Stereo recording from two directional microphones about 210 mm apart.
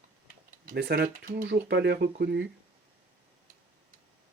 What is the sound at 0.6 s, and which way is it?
Speech, 50° right (ahead or behind).